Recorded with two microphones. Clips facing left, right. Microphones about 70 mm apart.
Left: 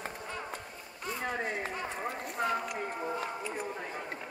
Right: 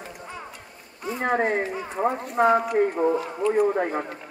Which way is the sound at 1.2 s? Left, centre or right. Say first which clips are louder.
Right 12 dB; right.